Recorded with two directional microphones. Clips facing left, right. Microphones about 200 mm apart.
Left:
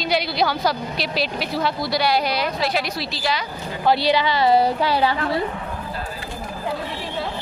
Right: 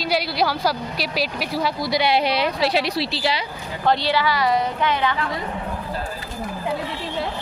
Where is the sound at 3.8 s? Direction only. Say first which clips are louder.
Left 2 dB; 10° left (ahead or behind); by 5.4 s 35° left (ahead or behind).